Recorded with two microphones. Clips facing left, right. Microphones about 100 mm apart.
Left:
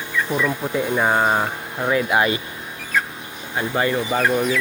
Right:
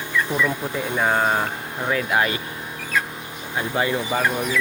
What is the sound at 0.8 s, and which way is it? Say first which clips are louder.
Speech: left 2 dB; 10° left (ahead or behind).